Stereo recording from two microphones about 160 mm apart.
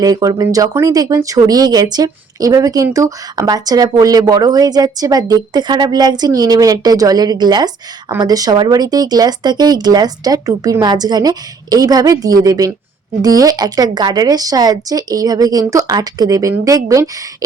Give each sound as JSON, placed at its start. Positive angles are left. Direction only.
{"t": 0.0, "sound": "speech", "side_deg": -20}